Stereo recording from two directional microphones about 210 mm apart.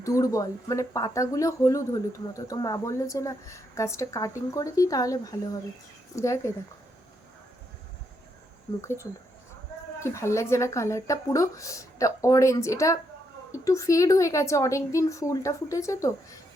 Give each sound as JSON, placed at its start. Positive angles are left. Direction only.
{"t": 0.0, "sound": "speech", "side_deg": 15}
{"t": 8.8, "sound": "speech", "side_deg": 15}